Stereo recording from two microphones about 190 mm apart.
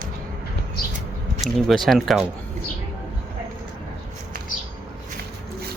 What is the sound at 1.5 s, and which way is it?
Speech, centre (ahead or behind).